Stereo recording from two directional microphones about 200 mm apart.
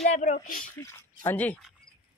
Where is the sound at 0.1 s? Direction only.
40° left (ahead or behind).